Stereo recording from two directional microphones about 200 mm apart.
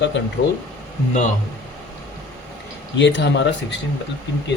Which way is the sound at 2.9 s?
65° left (ahead or behind).